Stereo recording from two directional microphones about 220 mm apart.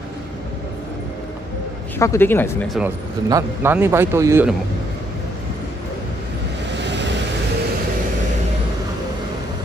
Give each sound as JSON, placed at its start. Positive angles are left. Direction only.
{"t": 2.0, "sound": "speech", "side_deg": 10}
{"t": 3.3, "sound": "a man's voice", "side_deg": -15}
{"t": 6.7, "sound": "vehicle", "side_deg": -55}